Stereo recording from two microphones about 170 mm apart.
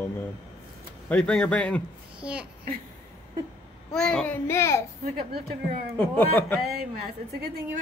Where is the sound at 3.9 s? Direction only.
5° left (ahead or behind).